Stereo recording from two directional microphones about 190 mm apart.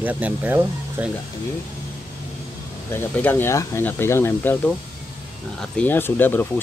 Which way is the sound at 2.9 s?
10° left (ahead or behind).